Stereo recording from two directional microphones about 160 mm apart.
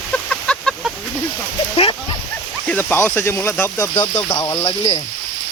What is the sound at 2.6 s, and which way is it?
Speech, 10° left (ahead or behind).